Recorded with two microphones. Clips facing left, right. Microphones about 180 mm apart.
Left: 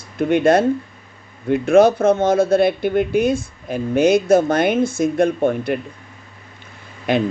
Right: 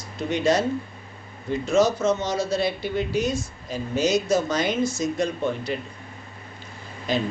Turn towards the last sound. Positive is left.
turn(degrees=60)  # may be behind; listen again after turning